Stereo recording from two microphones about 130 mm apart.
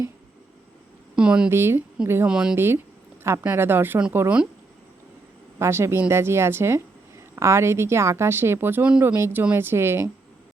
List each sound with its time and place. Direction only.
1.1 s a woman's voice: 5° right (ahead or behind)
1.5 s a woman's voice: 20° right (ahead or behind)
2.2 s a woman's voice: 5° right (ahead or behind)
2.6 s a woman's voice: 20° right (ahead or behind)
5.5 s a woman's voice: 20° right (ahead or behind)